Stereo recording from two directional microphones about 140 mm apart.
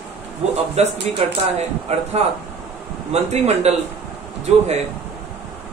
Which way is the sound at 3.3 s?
50° right (ahead or behind).